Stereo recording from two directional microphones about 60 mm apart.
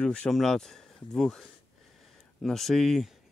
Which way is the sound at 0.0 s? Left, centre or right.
Centre.